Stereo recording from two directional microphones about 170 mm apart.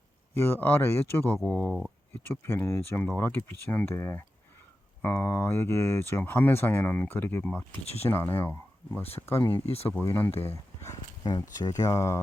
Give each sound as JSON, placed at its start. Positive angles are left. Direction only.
{"t": 0.3, "sound": "speech", "side_deg": 10}
{"t": 1.4, "sound": "speech", "side_deg": 0}
{"t": 2.2, "sound": "speech", "side_deg": 10}
{"t": 11.2, "sound": "speech", "side_deg": 25}